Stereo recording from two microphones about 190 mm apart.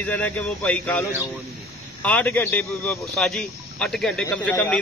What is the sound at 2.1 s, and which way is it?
A man's voice, 10° left (ahead or behind).